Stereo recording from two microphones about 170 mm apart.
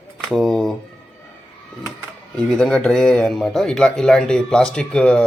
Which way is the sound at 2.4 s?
5° left (ahead or behind).